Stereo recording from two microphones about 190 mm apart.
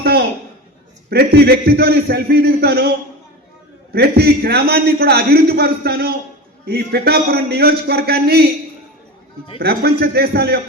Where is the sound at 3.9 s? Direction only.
55° right (ahead or behind).